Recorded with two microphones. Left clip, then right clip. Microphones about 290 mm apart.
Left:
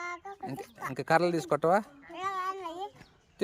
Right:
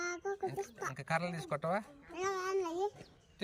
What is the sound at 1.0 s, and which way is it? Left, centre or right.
Speech, left.